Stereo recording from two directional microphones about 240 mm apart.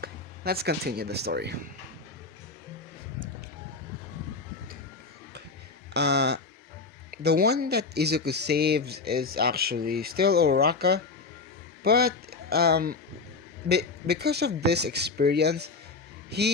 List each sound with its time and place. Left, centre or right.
0.0 s speech: right
5.9 s speech: right